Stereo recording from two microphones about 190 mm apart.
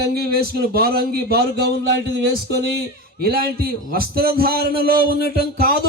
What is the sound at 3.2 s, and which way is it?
A man's voice, 50° right (ahead or behind).